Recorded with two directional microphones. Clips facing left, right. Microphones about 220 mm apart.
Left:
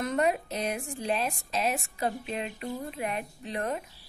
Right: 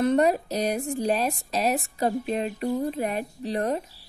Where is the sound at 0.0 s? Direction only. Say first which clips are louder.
Right 6 dB; 35° right (ahead or behind).